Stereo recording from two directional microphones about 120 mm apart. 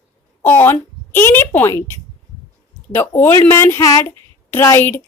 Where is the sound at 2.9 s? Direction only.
20° left (ahead or behind).